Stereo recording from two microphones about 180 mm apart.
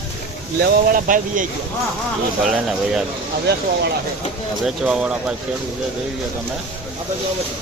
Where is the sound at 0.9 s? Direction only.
45° right (ahead or behind).